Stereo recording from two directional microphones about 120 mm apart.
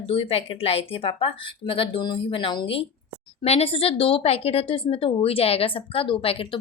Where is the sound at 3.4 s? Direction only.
60° left (ahead or behind).